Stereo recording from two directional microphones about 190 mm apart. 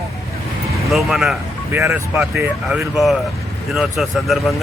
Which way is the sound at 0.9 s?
Centre (ahead or behind).